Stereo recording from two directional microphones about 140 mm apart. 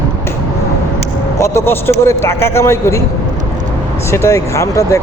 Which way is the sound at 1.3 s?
20° left (ahead or behind).